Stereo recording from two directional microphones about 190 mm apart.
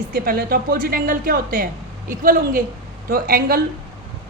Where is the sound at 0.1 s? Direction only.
50° right (ahead or behind).